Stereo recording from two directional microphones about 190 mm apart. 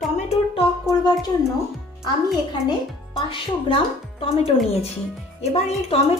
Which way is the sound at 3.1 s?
25° left (ahead or behind).